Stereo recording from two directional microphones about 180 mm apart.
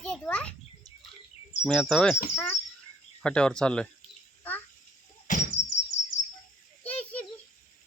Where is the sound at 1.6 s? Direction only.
5° left (ahead or behind).